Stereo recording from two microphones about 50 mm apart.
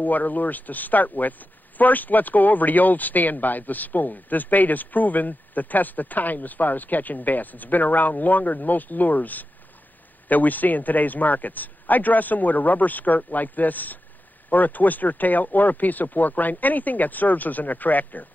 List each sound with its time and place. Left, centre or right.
0.0 s speech: left